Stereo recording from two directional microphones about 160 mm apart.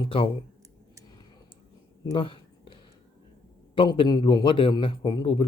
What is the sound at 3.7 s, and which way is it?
Speech, 30° left (ahead or behind).